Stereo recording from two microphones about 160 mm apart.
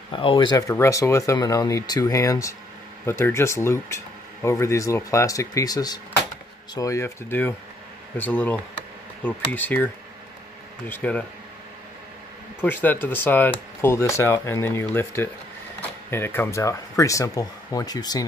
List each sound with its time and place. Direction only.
0.1 s speech: 35° left (ahead or behind); by 9.8 s 10° left (ahead or behind)
10.9 s speech: 10° left (ahead or behind)
12.6 s speech: 10° left (ahead or behind)